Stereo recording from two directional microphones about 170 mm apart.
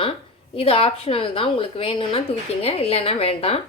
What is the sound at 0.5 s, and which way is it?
A woman's voice, 35° left (ahead or behind).